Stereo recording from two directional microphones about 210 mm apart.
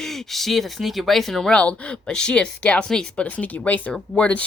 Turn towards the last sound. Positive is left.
turn(degrees=5)  # may be behind; listen again after turning